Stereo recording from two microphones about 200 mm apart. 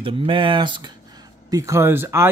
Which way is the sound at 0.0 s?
25° right (ahead or behind).